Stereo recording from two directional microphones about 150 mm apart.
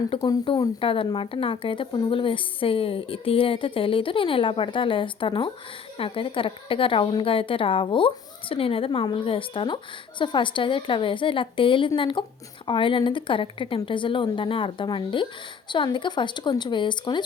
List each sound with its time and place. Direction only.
0.2 s a woman's voice: 30° left (ahead or behind)